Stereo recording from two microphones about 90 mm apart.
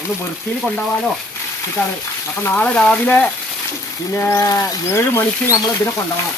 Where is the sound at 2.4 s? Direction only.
20° left (ahead or behind).